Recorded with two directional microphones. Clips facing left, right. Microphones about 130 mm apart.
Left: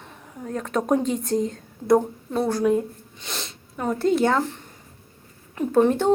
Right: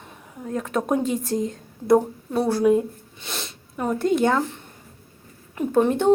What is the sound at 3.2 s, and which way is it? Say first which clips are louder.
Sniff: right 1 dB; 5° right (ahead or behind).